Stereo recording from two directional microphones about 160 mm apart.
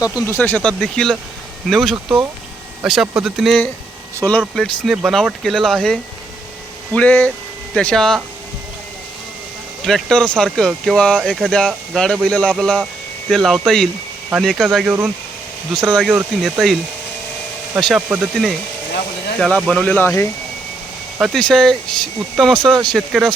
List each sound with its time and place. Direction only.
0.3 s speech: 15° left (ahead or behind)
9.8 s speech: 5° left (ahead or behind)
17.7 s speech: centre (ahead or behind)
21.2 s speech: centre (ahead or behind)